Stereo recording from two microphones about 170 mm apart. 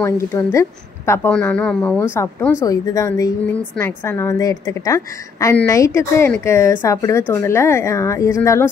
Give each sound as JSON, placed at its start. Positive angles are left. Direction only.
{"t": 0.0, "sound": "a woman's voice", "side_deg": 15}